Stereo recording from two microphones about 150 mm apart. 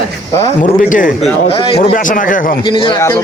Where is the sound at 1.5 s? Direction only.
40° left (ahead or behind).